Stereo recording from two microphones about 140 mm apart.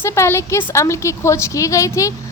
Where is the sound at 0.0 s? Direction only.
20° left (ahead or behind).